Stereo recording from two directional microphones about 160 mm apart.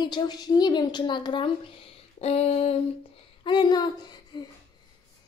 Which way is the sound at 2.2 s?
40° left (ahead or behind).